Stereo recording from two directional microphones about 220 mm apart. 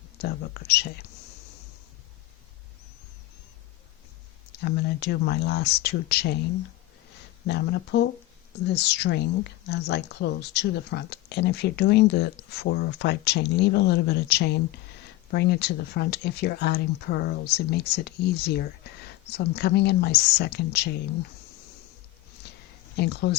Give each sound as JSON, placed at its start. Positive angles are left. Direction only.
{"t": 0.2, "sound": "speech", "side_deg": 45}
{"t": 4.6, "sound": "speech", "side_deg": 50}
{"t": 7.4, "sound": "speech", "side_deg": 50}
{"t": 22.4, "sound": "a sound", "side_deg": 50}
{"t": 23.0, "sound": "speech", "side_deg": 50}